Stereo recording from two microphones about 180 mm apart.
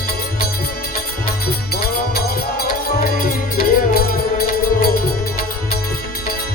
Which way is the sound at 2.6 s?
55° left (ahead or behind).